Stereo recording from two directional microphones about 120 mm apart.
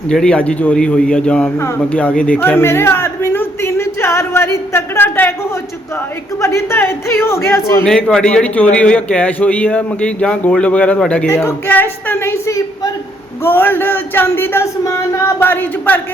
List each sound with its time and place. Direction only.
0.1 s a man's voice: 5° left (ahead or behind)
6.4 s speech: 25° left (ahead or behind)
7.9 s a man's voice: 5° left (ahead or behind)